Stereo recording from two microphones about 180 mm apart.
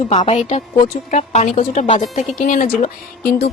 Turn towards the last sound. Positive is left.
turn(degrees=60)  # may be behind; listen again after turning